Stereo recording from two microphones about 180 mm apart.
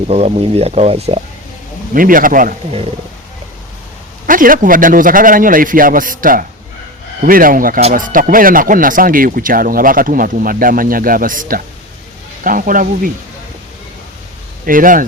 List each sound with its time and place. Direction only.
0.1 s speech: 35° right (ahead or behind)
1.9 s speech: 50° right (ahead or behind)
4.3 s speech: 50° right (ahead or behind)
14.7 s speech: 50° right (ahead or behind)